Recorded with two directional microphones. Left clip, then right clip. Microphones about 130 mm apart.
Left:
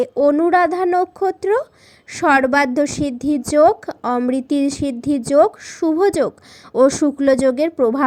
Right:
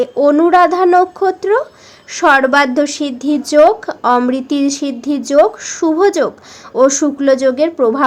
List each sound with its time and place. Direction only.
0.0 s a woman's voice: 40° left (ahead or behind)